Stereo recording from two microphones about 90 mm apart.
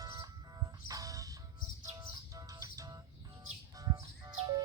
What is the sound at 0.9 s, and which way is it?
Music, 40° right (ahead or behind).